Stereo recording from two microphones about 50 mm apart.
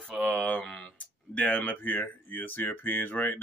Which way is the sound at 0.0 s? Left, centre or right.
Centre.